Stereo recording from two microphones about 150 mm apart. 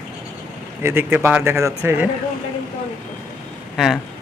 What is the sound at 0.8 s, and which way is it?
Speech, 15° right (ahead or behind).